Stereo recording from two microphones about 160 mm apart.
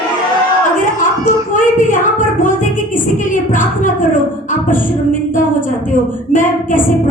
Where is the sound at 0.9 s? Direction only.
55° left (ahead or behind).